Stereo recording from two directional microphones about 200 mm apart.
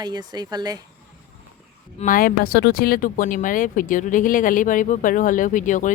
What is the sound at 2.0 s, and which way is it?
Speech, 45° left (ahead or behind).